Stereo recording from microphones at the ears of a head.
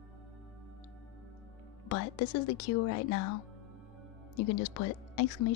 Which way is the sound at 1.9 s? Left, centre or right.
Left.